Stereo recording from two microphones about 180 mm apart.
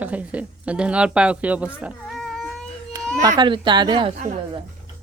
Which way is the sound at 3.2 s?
20° right (ahead or behind).